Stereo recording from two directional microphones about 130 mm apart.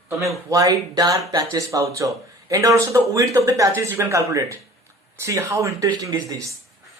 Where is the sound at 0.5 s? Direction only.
25° right (ahead or behind).